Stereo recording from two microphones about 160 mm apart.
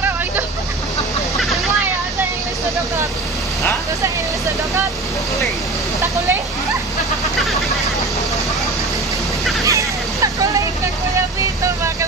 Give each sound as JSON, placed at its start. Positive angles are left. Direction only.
{"t": 9.7, "sound": "vehicle", "side_deg": -20}
{"t": 11.6, "sound": "vehicle", "side_deg": -20}